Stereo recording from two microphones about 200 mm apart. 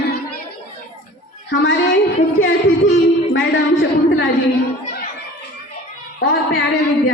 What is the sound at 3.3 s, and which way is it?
A man's voice, 60° left (ahead or behind).